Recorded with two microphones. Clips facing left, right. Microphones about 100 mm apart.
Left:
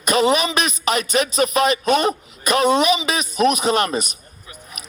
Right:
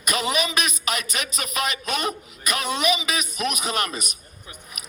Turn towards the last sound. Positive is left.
turn(degrees=30)  # may be behind; listen again after turning